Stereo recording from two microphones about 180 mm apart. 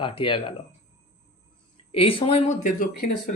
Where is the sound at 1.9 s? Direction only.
30° left (ahead or behind); by 3.3 s 45° left (ahead or behind).